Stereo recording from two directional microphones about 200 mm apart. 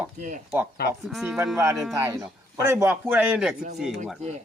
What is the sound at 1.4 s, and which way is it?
A man's voice, 15° right (ahead or behind).